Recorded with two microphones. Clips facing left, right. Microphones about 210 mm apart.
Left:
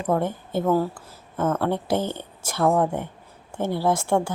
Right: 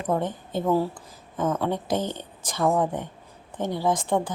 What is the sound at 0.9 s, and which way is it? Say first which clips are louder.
Speech: left 2 dB; 15° right (ahead or behind).